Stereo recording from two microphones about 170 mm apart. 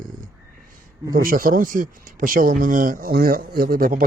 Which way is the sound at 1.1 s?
55° right (ahead or behind).